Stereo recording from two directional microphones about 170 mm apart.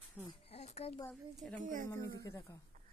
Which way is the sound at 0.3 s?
35° left (ahead or behind).